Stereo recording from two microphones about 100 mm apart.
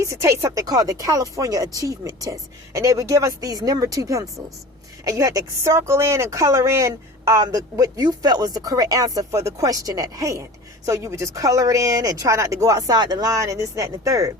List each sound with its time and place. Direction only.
0.0 s speech: 30° right (ahead or behind)